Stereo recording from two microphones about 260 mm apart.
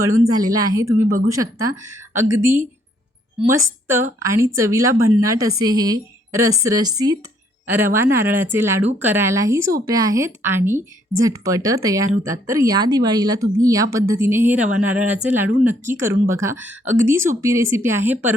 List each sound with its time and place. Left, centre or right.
0.3 s speech: centre